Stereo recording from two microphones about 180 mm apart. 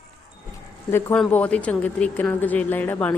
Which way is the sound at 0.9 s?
10° left (ahead or behind).